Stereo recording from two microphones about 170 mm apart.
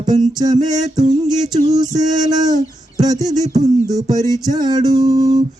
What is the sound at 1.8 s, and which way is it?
Mantra, 20° right (ahead or behind).